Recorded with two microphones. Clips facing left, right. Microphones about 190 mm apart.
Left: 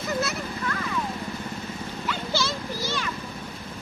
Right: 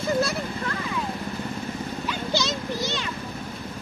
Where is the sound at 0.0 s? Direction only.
30° right (ahead or behind).